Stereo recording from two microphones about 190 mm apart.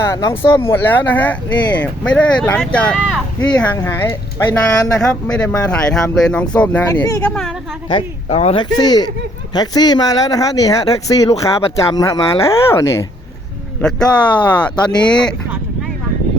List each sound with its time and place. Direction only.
0.0 s speech: 15° left (ahead or behind)
7.9 s speech: 30° left (ahead or behind); by 15.4 s 5° left (ahead or behind)